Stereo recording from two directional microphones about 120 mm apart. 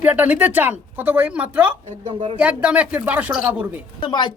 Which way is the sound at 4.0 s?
40° left (ahead or behind).